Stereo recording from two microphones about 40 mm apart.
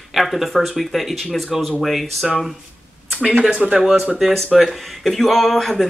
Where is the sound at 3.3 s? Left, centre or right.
Right.